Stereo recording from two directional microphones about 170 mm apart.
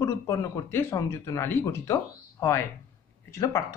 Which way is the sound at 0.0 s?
15° left (ahead or behind).